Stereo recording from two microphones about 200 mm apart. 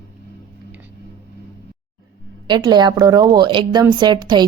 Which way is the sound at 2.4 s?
20° right (ahead or behind).